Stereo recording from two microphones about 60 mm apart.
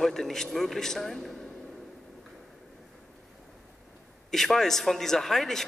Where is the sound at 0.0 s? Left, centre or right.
Centre.